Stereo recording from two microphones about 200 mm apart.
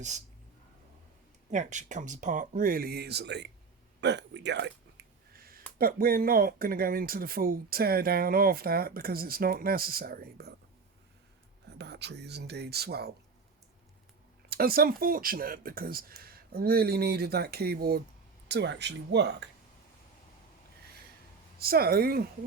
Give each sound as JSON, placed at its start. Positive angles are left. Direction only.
{"t": 1.5, "sound": "speech", "side_deg": -40}
{"t": 5.3, "sound": "a sound", "side_deg": -50}
{"t": 5.8, "sound": "speech", "side_deg": -45}
{"t": 11.8, "sound": "speech", "side_deg": -55}
{"t": 14.5, "sound": "speech", "side_deg": -50}
{"t": 21.6, "sound": "speech", "side_deg": -50}